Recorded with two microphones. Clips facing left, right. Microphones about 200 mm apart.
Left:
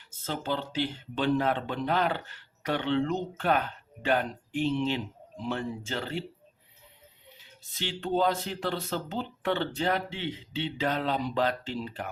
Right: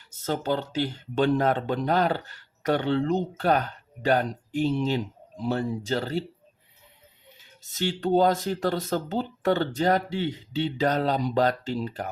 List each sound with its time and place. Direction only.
0.1 s speech: 45° right (ahead or behind)
7.7 s speech: 45° right (ahead or behind)